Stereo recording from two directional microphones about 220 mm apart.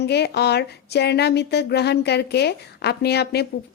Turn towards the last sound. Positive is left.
turn(degrees=50)  # may be behind; listen again after turning